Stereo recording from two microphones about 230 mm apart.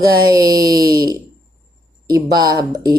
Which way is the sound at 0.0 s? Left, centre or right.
Centre.